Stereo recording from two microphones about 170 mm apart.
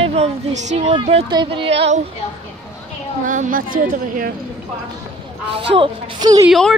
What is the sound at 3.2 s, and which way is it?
A woman's voice, 50° right (ahead or behind).